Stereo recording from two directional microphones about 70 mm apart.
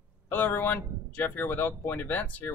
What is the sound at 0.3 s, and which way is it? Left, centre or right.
Speech, left.